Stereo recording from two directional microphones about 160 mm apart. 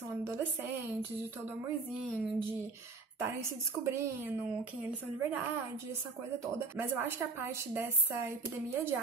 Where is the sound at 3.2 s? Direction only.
15° right (ahead or behind).